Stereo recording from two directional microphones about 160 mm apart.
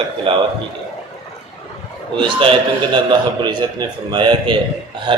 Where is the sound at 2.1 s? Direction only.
30° right (ahead or behind).